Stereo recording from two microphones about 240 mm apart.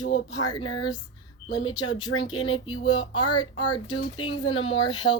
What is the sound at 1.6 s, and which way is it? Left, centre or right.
A woman's voice, centre.